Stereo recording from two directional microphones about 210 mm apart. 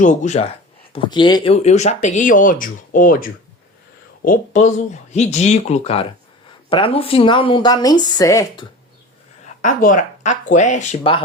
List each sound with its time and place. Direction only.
0.0 s speech: 35° left (ahead or behind)
0.9 s speech: 20° left (ahead or behind)
9.6 s speech: 40° left (ahead or behind)